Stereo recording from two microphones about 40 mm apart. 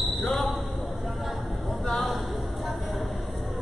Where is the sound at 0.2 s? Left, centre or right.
Centre.